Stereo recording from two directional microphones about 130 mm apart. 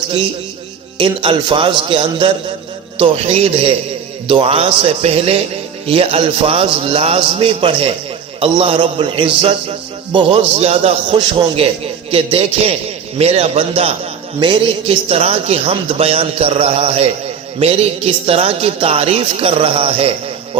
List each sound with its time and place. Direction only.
0.9 s a man's voice: 40° right (ahead or behind)